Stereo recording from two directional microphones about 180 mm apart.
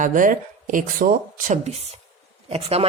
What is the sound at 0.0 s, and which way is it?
A woman's voice, 45° right (ahead or behind).